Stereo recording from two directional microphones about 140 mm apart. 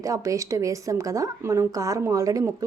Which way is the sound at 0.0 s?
25° right (ahead or behind).